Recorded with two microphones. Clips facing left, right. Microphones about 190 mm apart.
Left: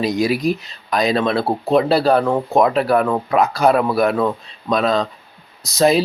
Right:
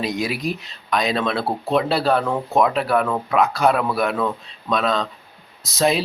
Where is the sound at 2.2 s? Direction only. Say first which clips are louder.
Left 5 dB; 25° left (ahead or behind).